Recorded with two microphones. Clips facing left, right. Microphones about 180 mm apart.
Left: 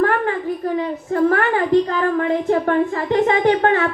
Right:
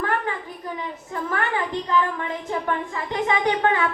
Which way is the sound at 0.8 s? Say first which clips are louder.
Left 13 dB; 50° left (ahead or behind).